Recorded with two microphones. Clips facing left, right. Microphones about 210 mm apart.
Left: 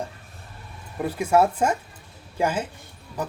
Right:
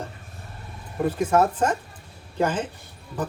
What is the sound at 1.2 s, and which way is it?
Speech, 10° left (ahead or behind).